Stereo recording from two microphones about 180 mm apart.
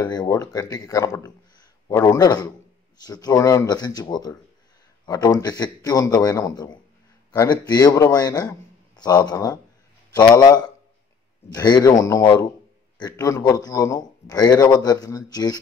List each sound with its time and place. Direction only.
0.0 s a man's voice: 20° left (ahead or behind)